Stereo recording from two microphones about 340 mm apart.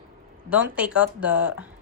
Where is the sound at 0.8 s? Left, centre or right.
Centre.